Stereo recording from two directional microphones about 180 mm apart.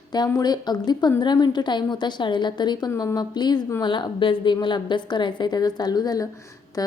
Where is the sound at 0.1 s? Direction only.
20° left (ahead or behind).